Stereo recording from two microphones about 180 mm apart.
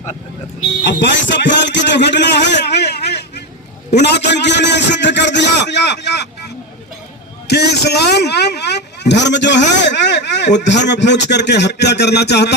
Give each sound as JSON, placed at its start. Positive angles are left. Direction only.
{"t": 0.9, "sound": "a man's voice", "side_deg": 80}
{"t": 7.4, "sound": "a man's voice", "side_deg": 65}